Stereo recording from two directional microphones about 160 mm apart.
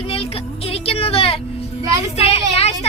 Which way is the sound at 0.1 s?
35° left (ahead or behind).